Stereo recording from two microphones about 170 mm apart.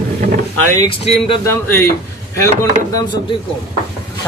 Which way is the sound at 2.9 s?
25° left (ahead or behind).